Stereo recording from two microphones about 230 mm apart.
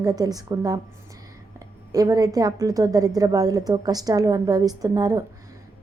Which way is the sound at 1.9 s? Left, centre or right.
Centre.